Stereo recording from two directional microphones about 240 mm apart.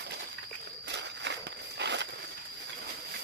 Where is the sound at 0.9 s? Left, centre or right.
Right.